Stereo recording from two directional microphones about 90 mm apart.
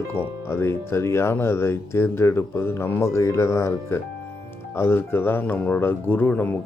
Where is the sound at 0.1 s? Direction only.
25° left (ahead or behind).